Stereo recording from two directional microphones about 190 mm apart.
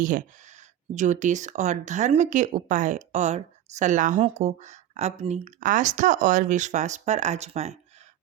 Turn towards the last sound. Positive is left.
turn(degrees=-35)  # may be behind; listen again after turning